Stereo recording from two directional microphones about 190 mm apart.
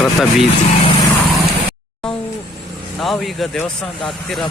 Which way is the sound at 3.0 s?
Centre (ahead or behind).